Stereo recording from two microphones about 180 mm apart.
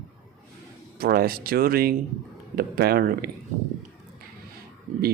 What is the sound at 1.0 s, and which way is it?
Speech, 55° right (ahead or behind).